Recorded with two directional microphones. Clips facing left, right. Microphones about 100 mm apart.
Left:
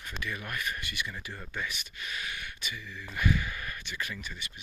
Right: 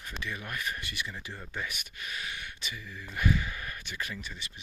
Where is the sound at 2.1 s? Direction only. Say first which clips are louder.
Left 1 dB; 35° right (ahead or behind).